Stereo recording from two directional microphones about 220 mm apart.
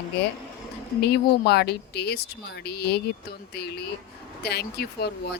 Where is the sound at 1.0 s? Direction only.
45° left (ahead or behind).